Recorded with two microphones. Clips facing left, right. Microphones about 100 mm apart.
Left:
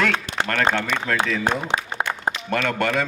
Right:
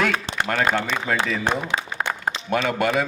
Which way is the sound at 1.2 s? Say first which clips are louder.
Left 1 dB; centre (ahead or behind).